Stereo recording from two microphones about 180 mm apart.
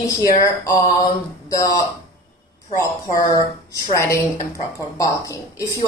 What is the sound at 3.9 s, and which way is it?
Speech, 15° left (ahead or behind).